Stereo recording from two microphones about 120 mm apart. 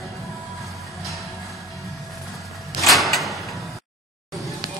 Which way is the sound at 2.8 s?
Centre (ahead or behind).